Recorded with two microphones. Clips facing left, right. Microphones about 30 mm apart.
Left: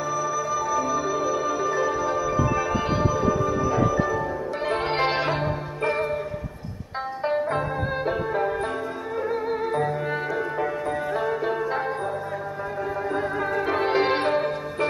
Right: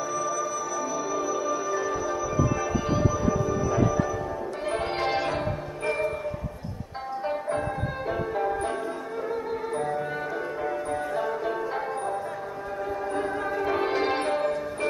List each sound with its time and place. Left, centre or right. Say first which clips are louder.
0.1 s music: left 5 dB; left
7.2 s music: left 4 dB; left
11.1 s music: left 4 dB; left
13.1 s music: left 3 dB; centre